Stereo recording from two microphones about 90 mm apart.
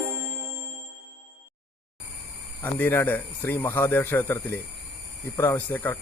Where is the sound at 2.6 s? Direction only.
25° left (ahead or behind).